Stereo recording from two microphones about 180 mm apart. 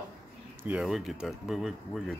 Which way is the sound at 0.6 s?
5° right (ahead or behind).